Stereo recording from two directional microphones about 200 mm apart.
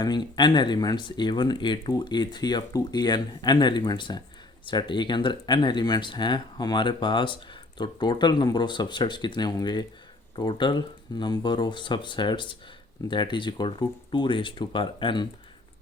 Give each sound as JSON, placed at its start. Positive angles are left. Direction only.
{"t": 0.0, "sound": "speech", "side_deg": 20}